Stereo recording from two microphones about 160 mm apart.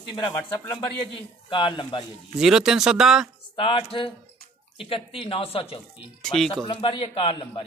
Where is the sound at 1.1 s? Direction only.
30° left (ahead or behind).